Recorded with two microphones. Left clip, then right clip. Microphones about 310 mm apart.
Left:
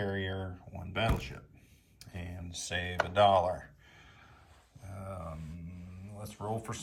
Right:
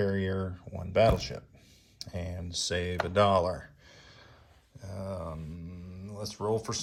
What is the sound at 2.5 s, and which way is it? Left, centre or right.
Speech, right.